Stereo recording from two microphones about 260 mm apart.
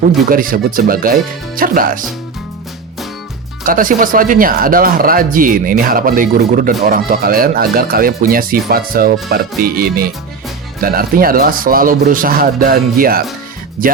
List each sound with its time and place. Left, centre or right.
0.3 s speech: right
3.7 s speech: right